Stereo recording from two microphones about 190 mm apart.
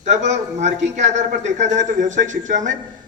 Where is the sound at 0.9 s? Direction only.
35° right (ahead or behind).